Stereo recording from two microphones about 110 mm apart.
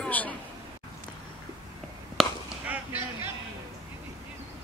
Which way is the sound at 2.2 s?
Centre (ahead or behind).